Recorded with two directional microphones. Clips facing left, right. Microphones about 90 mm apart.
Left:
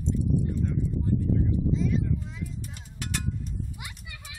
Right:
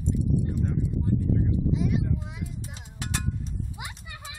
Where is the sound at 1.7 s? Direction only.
65° right (ahead or behind).